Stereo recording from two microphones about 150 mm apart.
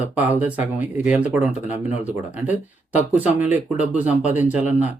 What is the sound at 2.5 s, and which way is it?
Speech, 50° left (ahead or behind).